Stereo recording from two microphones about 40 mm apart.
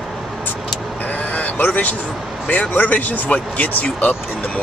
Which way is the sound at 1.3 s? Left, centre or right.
Left.